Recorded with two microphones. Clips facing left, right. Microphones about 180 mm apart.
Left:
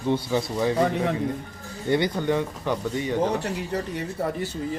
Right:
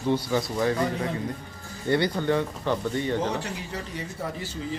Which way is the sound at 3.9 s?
55° left (ahead or behind).